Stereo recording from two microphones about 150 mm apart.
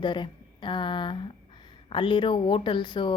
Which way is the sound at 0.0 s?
30° left (ahead or behind).